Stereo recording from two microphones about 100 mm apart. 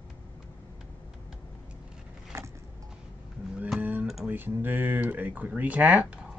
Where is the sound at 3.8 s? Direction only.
15° right (ahead or behind).